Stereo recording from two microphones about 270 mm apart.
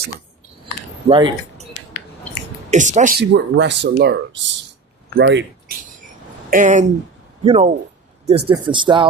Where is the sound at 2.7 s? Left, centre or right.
Right.